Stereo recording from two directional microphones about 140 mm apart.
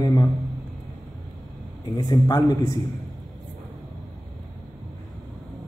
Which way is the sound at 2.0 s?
25° left (ahead or behind).